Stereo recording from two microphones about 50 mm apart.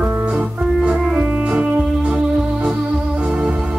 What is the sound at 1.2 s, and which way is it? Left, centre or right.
Music, right.